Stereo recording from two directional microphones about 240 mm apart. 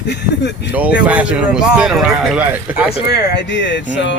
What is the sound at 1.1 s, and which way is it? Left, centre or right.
Speech, centre.